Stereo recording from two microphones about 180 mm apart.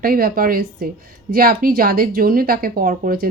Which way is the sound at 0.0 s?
55° right (ahead or behind).